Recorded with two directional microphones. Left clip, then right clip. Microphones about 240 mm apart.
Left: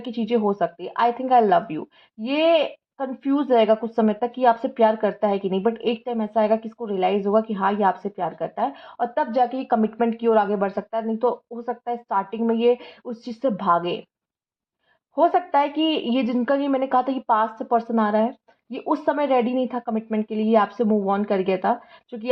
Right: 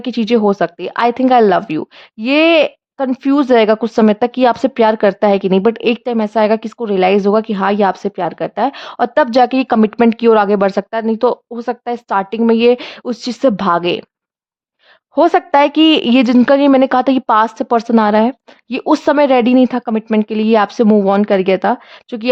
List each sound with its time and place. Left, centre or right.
0.0 s a woman's voice: right
15.1 s a woman's voice: right